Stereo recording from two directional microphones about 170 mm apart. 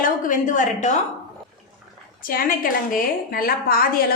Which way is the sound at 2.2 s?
55° left (ahead or behind).